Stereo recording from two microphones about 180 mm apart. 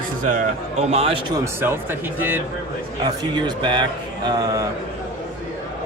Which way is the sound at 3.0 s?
25° right (ahead or behind).